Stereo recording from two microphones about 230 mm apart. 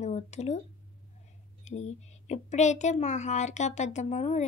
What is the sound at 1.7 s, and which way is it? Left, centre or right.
Speech, left.